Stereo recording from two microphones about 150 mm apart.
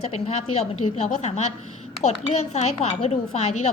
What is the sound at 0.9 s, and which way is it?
A woman's voice, 45° left (ahead or behind).